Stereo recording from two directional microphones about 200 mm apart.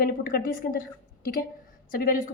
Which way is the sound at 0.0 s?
50° left (ahead or behind).